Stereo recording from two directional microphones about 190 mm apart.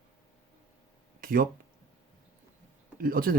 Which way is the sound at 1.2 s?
50° right (ahead or behind).